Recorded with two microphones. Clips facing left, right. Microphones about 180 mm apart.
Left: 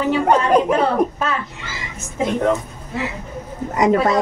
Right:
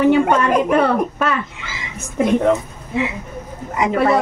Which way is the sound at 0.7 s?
65° right (ahead or behind).